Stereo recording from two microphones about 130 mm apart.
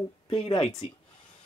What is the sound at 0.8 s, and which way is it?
Speech, 50° left (ahead or behind).